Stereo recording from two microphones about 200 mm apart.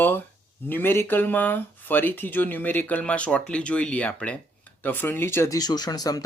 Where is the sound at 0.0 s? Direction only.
10° left (ahead or behind).